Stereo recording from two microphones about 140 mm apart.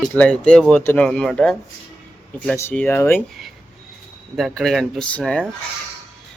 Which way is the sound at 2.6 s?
15° left (ahead or behind).